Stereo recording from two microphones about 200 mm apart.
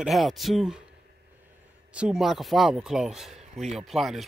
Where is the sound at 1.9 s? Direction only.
Centre (ahead or behind).